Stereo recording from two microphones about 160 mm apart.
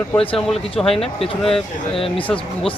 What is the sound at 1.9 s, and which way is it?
Speech, 35° left (ahead or behind).